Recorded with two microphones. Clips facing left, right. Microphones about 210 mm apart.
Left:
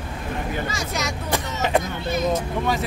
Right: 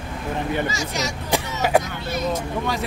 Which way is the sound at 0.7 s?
55° left (ahead or behind).